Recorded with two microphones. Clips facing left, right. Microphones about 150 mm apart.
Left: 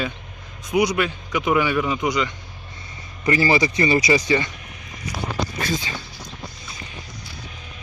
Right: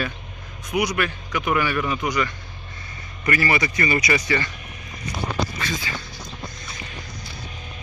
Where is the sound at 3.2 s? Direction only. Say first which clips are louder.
Left 4 dB; 25° left (ahead or behind).